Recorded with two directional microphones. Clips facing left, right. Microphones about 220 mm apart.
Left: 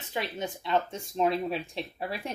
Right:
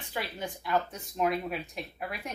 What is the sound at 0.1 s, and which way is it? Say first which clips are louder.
Speech: left 3 dB; 25° left (ahead or behind).